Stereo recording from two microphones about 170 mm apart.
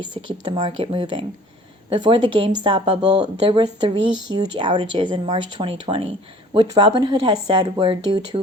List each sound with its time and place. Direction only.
0.0 s speech: 25° right (ahead or behind)